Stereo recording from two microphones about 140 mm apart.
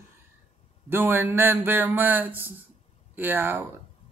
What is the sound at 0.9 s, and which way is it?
A man's voice, 15° right (ahead or behind).